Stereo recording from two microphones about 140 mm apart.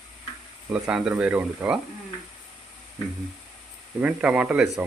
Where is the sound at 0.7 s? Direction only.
5° right (ahead or behind).